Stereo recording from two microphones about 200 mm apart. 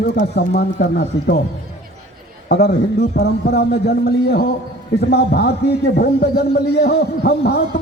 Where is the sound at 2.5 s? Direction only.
50° left (ahead or behind).